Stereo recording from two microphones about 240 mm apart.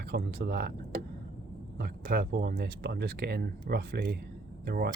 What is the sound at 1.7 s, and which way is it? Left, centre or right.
Speech, right.